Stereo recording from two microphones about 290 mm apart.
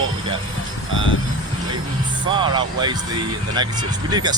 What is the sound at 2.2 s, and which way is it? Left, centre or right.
Speech, centre.